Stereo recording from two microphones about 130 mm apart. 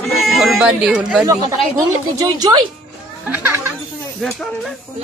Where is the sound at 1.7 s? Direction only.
30° right (ahead or behind).